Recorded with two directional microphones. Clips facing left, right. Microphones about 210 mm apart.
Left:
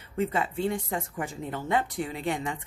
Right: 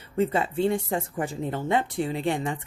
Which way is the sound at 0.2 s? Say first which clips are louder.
Right 4 dB; 30° right (ahead or behind).